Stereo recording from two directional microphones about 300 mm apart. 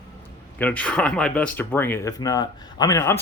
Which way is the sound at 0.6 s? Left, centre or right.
Centre.